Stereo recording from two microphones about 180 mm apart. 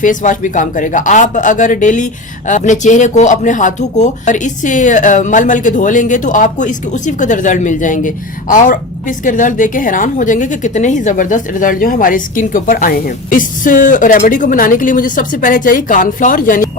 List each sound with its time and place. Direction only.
0.0 s speech: 45° left (ahead or behind)